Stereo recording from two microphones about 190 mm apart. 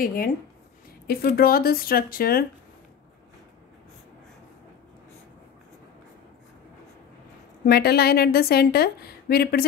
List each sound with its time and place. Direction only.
0.0 s speech: 50° left (ahead or behind)
7.6 s a woman's voice: 55° left (ahead or behind)